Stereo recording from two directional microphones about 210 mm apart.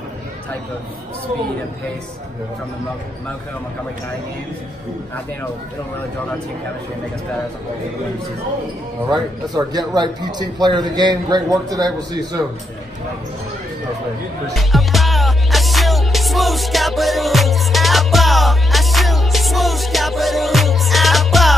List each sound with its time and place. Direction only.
9.1 s a man's voice: 20° right (ahead or behind)
14.5 s music: centre (ahead or behind)